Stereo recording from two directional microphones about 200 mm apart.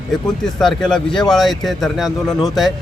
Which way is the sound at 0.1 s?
Centre (ahead or behind).